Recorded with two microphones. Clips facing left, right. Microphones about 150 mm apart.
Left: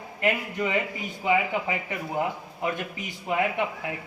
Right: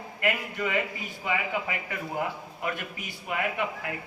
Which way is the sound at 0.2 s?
20° left (ahead or behind).